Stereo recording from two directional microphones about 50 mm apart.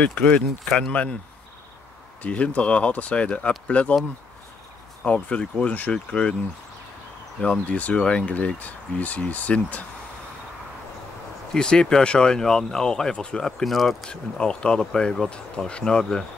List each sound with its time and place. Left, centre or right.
0.0 s speech: left
2.2 s speech: left
5.0 s speech: left
7.4 s speech: left
11.5 s speech: centre
13.7 s speech: centre
14.4 s speech: centre